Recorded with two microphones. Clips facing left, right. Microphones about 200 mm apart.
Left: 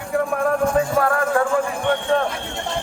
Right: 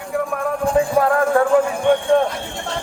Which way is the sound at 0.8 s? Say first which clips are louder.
Right 2 dB; 20° right (ahead or behind).